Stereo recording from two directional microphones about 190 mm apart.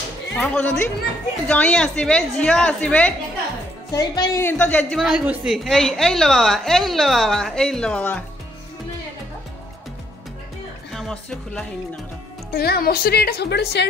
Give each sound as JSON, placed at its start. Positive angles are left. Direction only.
{"t": 0.4, "sound": "a woman's voice", "side_deg": 10}
{"t": 10.9, "sound": "speech", "side_deg": 0}
{"t": 12.5, "sound": "a woman's voice", "side_deg": 55}